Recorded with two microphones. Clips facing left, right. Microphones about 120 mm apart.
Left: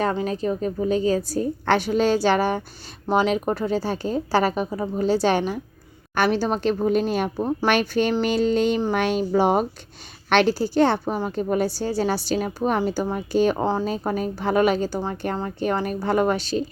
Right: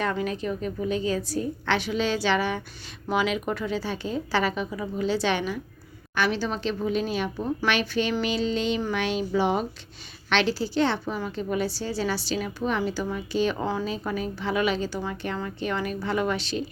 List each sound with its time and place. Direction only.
0.0 s a woman's voice: 30° left (ahead or behind)